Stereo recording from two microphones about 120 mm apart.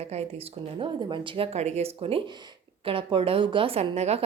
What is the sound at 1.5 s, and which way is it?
A woman's voice, 65° right (ahead or behind).